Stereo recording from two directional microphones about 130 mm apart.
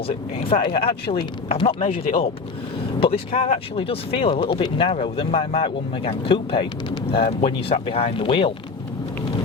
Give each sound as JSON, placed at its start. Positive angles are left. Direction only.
{"t": 0.3, "sound": "speech", "side_deg": 55}
{"t": 3.0, "sound": "speech", "side_deg": 50}